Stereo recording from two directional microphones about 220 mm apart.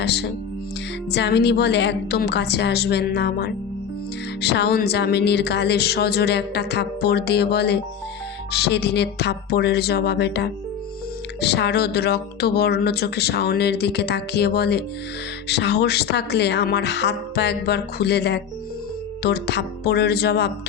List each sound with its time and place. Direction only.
0.0 s speech: 50° left (ahead or behind)